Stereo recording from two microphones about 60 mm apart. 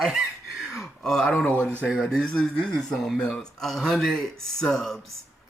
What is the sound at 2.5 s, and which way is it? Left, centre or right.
Speech, centre.